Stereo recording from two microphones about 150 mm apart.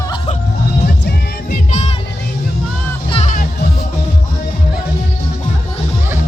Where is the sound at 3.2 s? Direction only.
65° left (ahead or behind).